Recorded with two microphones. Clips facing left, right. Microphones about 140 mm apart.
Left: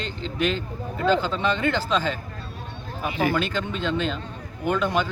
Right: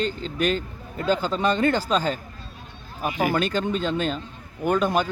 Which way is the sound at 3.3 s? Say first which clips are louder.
Right 2 dB; 40° right (ahead or behind).